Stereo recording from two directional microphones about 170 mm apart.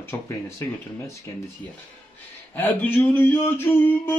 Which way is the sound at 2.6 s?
10° left (ahead or behind).